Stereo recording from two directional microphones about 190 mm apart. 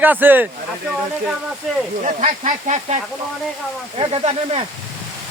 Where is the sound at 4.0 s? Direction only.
30° right (ahead or behind).